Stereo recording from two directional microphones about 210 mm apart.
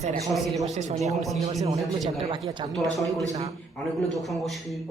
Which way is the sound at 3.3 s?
30° right (ahead or behind).